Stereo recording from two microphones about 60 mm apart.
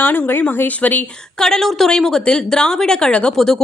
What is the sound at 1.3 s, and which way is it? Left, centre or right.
A woman's voice, centre.